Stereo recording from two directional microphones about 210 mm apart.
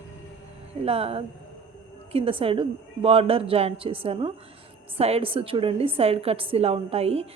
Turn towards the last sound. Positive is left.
turn(degrees=-30)  # may be behind; listen again after turning